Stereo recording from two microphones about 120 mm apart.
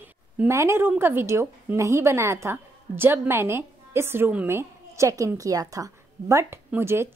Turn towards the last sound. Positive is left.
turn(degrees=-20)  # may be behind; listen again after turning